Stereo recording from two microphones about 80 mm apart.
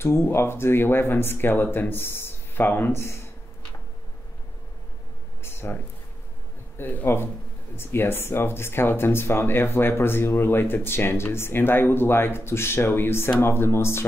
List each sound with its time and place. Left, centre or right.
0.0 s speech: left
5.4 s a sound: left
6.8 s speech: left